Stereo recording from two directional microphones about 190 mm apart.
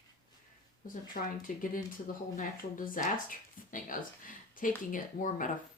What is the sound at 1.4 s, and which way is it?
Speech, 45° left (ahead or behind).